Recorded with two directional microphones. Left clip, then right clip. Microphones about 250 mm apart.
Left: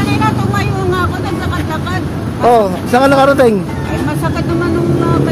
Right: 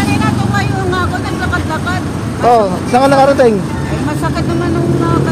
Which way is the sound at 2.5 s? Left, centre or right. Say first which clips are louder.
Right 1 dB; centre.